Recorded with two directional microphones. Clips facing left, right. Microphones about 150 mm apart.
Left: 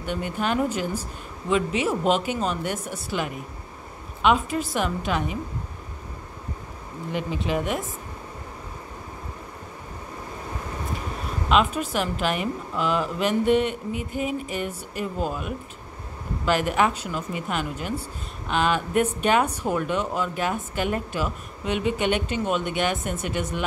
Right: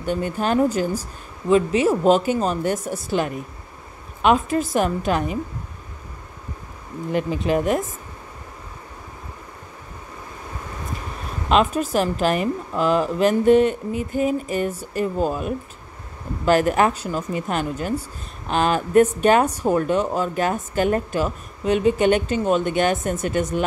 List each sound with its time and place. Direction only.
0.0 s a woman's voice: 40° right (ahead or behind)
7.1 s a woman's voice: 45° right (ahead or behind)
11.4 s a woman's voice: 40° right (ahead or behind)